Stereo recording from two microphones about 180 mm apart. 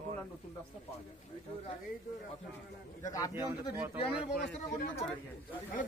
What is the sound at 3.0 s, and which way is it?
Speech, 20° left (ahead or behind).